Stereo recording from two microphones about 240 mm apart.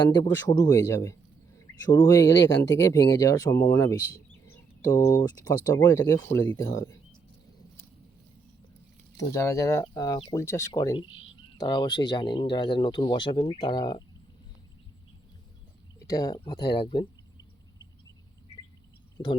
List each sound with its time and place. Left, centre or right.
0.1 s speech: centre
3.8 s bird: centre
5.0 s speech: centre
9.1 s speech: centre
16.0 s speech: centre
19.2 s speech: centre